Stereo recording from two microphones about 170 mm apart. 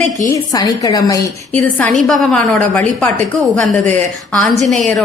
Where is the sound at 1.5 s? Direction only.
10° left (ahead or behind).